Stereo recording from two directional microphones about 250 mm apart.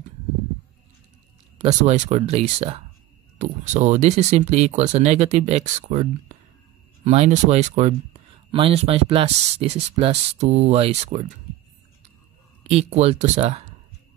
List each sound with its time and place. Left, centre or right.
1.6 s speech: right
12.6 s speech: right